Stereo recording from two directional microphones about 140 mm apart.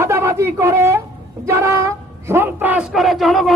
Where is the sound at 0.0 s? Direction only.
20° right (ahead or behind).